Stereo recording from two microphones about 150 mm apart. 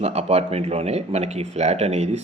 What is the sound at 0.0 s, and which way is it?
Speech, 45° right (ahead or behind).